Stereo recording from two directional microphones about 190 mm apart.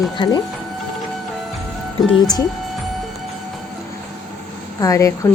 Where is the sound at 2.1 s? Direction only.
20° left (ahead or behind).